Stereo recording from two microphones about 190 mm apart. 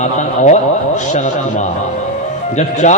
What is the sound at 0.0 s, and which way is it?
Speech, 40° left (ahead or behind).